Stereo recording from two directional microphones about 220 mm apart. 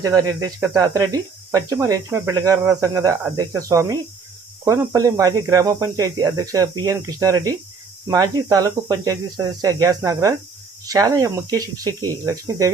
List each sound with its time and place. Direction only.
0.0 s speech: 15° right (ahead or behind)